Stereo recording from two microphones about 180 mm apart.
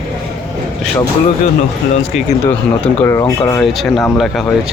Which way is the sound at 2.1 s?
Centre (ahead or behind).